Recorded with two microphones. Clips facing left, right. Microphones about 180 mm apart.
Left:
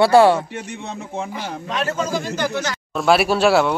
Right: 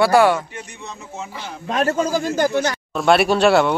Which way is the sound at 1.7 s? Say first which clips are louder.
Right 4 dB; 45° right (ahead or behind).